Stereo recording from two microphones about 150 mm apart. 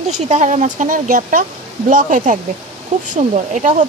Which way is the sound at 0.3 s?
50° right (ahead or behind).